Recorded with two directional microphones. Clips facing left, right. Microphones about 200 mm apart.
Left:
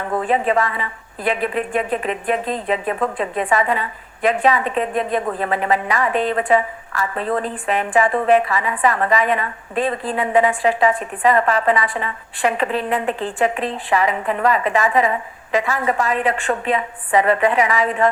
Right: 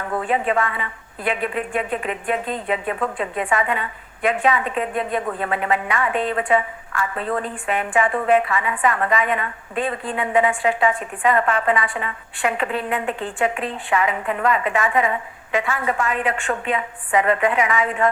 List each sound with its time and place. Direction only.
0.3 s a woman's voice: 35° left (ahead or behind)